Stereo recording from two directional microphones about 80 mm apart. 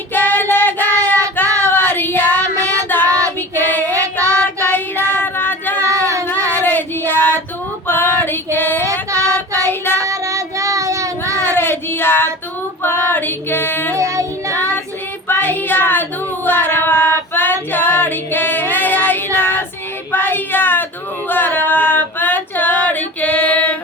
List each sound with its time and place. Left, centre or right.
0.1 s child singing: left
5.9 s child singing: right
6.2 s child singing: left
7.9 s female singing: left
8.8 s female singing: right
9.6 s child singing: left
10.0 s child singing: right
11.6 s a sound: left
12.8 s female singing: left
13.9 s child singing: right
15.3 s child singing: left
20.1 s a sound: left
21.2 s female singing: left